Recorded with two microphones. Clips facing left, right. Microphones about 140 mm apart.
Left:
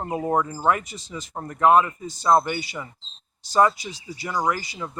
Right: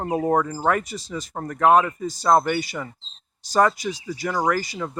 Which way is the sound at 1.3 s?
50° right (ahead or behind).